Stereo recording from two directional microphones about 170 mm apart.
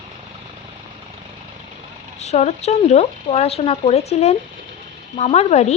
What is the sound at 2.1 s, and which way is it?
A woman's voice, 40° left (ahead or behind).